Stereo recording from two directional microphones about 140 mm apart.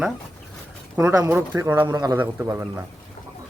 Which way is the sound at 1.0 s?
15° right (ahead or behind).